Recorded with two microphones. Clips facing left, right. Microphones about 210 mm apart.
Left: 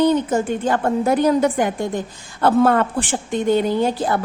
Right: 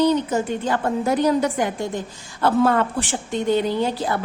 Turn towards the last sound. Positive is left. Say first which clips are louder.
# left 3 dB
turn(degrees=50)  # may be behind; listen again after turning